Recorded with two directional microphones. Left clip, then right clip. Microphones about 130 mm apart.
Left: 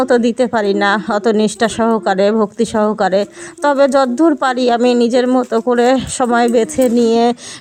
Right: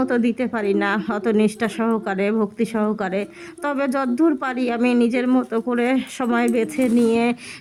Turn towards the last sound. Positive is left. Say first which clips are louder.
# left 7 dB
turn(degrees=40)  # may be behind; listen again after turning